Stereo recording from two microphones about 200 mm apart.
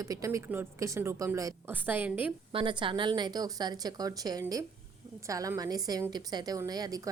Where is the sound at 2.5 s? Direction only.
25° right (ahead or behind).